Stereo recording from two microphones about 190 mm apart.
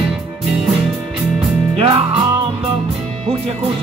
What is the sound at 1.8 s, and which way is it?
Music, 30° right (ahead or behind).